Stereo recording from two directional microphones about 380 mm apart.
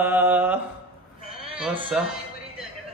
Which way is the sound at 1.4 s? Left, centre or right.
Centre.